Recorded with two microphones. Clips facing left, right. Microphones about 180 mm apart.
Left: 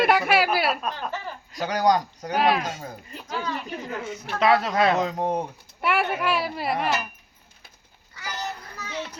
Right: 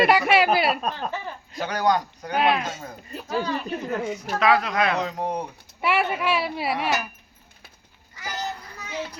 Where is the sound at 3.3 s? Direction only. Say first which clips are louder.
Right 4 dB; 35° right (ahead or behind).